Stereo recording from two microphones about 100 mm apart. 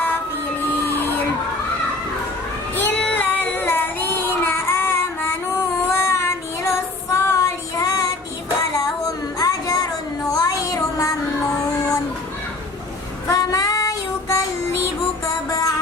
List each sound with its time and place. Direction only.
0.9 s a sound: 20° left (ahead or behind)
2.9 s child singing: 10° left (ahead or behind); by 8.0 s 35° left (ahead or behind)
9.4 s a sound: 35° left (ahead or behind)
10.2 s child singing: 35° left (ahead or behind)
13.2 s child singing: 35° left (ahead or behind)
15.4 s music: 35° left (ahead or behind)